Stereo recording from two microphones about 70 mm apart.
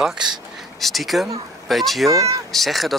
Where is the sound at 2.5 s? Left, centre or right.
Centre.